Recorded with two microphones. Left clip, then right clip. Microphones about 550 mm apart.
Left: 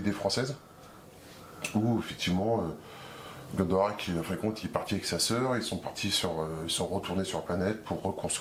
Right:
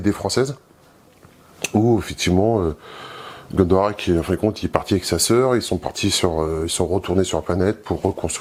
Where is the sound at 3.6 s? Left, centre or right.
Right.